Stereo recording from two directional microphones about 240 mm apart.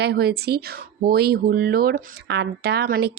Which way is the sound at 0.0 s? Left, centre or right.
Right.